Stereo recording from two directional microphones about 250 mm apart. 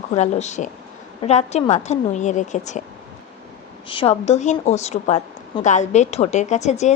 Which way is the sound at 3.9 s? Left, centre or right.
Left.